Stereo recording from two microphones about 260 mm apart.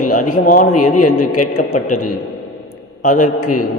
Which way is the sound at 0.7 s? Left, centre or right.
Left.